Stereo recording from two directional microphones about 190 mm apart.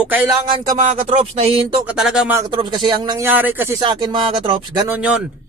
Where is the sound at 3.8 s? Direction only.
25° right (ahead or behind).